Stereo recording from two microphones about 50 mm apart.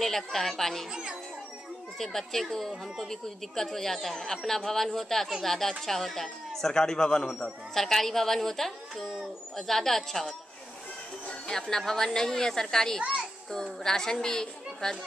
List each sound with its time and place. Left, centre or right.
0.0 s a woman's voice: centre
2.0 s a woman's voice: centre
7.7 s a woman's voice: centre
13.0 s a child's voice: right
13.5 s speech: centre